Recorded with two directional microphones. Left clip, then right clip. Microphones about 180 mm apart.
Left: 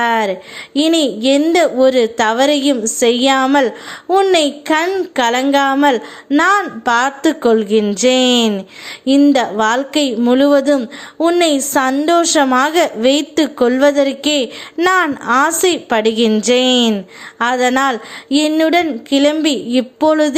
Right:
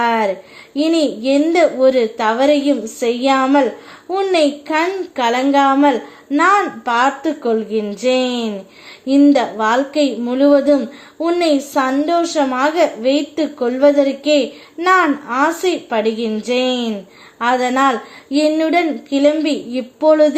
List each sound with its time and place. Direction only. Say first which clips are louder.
0.0 s a woman's voice: left 1 dB; 25° left (ahead or behind)